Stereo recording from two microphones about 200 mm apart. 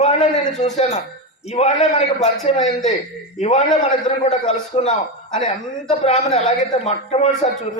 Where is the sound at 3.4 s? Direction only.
35° left (ahead or behind).